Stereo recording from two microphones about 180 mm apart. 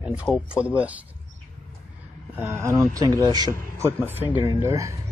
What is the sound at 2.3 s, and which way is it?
Speech, 15° right (ahead or behind).